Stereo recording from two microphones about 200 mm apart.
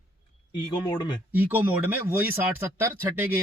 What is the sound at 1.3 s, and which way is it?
A man's voice, 10° right (ahead or behind).